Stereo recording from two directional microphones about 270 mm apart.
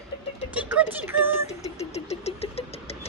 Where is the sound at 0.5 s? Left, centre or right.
Centre.